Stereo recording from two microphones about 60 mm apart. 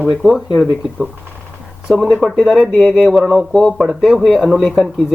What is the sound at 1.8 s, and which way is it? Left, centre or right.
Speech, centre.